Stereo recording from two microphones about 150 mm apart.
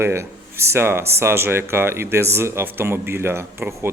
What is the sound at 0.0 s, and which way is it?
Speech, 15° right (ahead or behind).